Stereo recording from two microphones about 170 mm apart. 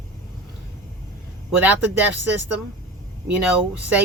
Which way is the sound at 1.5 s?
10° right (ahead or behind).